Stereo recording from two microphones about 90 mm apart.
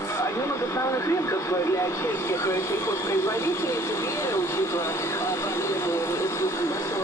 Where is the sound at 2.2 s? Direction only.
30° left (ahead or behind).